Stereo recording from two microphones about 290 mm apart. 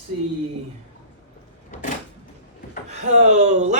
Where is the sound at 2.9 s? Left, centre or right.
Right.